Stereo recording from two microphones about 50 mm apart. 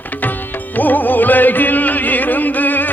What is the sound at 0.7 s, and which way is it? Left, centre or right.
Music, left.